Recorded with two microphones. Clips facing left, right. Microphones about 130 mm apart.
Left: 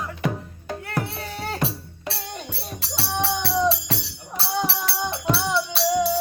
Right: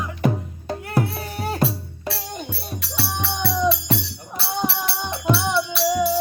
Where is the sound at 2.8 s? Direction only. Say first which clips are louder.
Left 2 dB; 30° left (ahead or behind).